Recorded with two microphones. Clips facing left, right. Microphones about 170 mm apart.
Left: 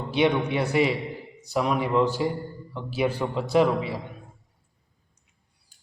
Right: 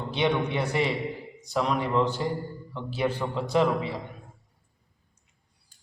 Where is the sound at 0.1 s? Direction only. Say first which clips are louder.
Left 3 dB; 5° left (ahead or behind).